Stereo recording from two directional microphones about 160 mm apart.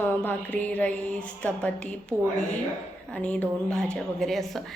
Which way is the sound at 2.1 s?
15° right (ahead or behind).